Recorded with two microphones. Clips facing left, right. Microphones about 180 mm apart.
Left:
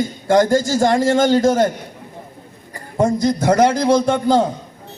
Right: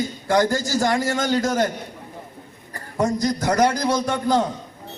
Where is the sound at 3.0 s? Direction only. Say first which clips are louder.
Left 5 dB; 25° left (ahead or behind).